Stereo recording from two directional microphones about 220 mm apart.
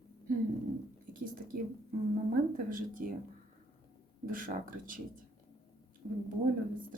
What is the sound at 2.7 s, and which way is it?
Speech, 40° right (ahead or behind).